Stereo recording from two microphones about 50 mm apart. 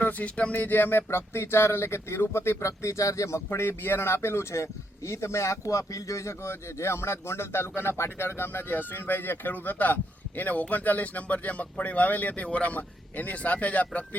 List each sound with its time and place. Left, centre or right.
0.0 s speech: left
0.6 s speech: left